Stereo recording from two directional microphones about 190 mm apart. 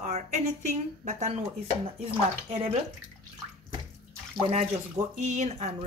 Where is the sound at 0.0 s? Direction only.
40° right (ahead or behind).